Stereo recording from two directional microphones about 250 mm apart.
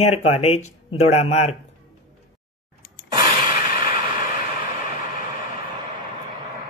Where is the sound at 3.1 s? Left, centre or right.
Centre.